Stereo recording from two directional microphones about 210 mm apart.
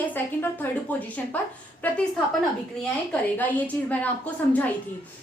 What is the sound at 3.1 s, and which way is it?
A woman's voice, 10° left (ahead or behind).